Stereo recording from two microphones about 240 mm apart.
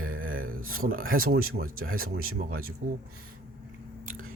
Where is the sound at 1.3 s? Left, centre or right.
Right.